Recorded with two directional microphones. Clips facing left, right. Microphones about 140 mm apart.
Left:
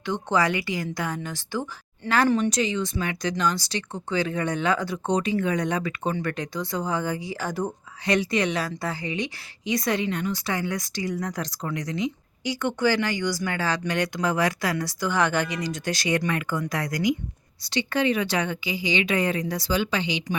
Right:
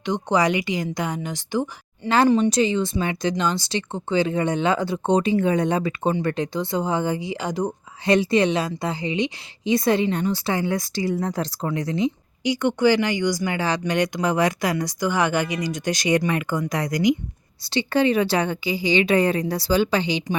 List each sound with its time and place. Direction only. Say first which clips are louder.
0.0 s speech: right 3 dB; 15° right (ahead or behind)
8.0 s speech: right 5 dB; 30° right (ahead or behind)
12.4 s speech: right 5 dB; 15° right (ahead or behind)
17.7 s a woman's voice: right 4 dB; 30° right (ahead or behind)